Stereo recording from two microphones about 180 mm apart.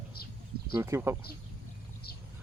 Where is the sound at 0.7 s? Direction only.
15° right (ahead or behind).